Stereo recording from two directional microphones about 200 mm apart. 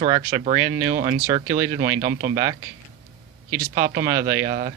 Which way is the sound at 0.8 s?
40° right (ahead or behind).